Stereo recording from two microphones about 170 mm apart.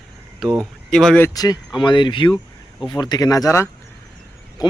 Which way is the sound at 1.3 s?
25° left (ahead or behind).